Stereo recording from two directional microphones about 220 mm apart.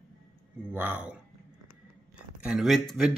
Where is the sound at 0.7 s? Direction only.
10° right (ahead or behind).